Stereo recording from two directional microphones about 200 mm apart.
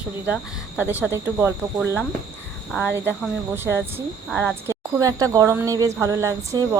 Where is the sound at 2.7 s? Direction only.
5° left (ahead or behind).